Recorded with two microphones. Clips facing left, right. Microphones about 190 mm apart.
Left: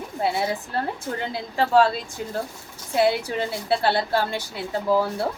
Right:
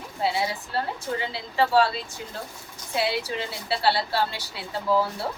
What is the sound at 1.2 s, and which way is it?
A woman's voice, 50° left (ahead or behind).